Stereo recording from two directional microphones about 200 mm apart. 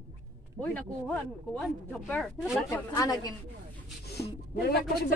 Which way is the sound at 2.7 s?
15° left (ahead or behind).